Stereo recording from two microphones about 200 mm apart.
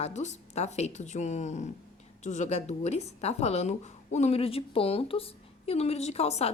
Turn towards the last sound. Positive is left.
turn(degrees=30)  # may be behind; listen again after turning